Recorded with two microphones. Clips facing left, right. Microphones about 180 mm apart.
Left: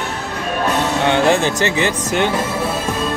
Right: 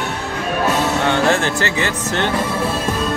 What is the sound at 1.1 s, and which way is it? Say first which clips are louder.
Speech: left 4 dB; 15° left (ahead or behind).